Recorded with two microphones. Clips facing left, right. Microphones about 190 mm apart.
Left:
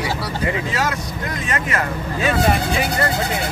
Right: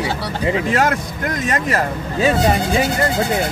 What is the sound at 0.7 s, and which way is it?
Speech, 55° right (ahead or behind).